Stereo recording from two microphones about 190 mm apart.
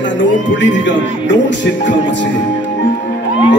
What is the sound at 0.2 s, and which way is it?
Music, 70° left (ahead or behind).